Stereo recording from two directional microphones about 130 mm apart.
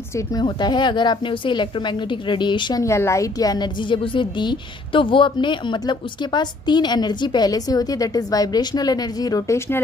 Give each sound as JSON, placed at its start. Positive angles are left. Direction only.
{"t": 0.3, "sound": "a woman's voice", "side_deg": 35}
{"t": 2.8, "sound": "a woman's voice", "side_deg": 20}